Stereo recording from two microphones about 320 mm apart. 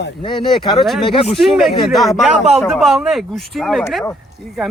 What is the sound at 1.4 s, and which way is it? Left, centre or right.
Speech, centre.